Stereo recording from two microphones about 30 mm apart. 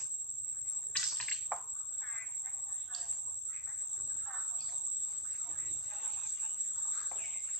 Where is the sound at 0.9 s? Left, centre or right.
Left.